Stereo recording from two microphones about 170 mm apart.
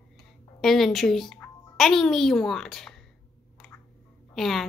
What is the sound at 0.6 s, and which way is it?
Speech, centre (ahead or behind).